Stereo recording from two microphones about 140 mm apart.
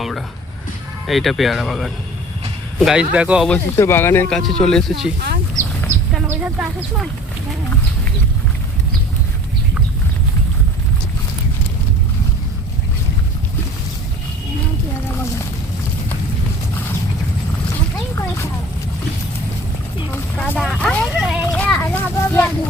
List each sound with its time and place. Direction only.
1.0 s speech: centre (ahead or behind)
3.5 s speech: 15° left (ahead or behind)
4.3 s speech: 5° left (ahead or behind)
6.2 s chicken: 10° right (ahead or behind)
20.4 s a child's voice: 5° left (ahead or behind)